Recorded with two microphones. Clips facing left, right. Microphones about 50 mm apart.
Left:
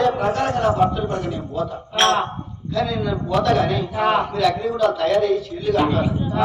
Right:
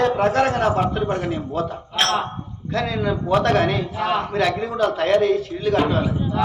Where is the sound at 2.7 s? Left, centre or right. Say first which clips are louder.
Even; right.